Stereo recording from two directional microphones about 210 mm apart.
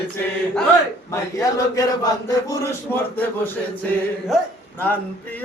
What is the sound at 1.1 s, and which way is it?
Male singing, 15° left (ahead or behind).